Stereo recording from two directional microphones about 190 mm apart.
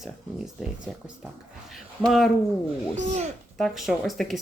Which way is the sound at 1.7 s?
Centre (ahead or behind).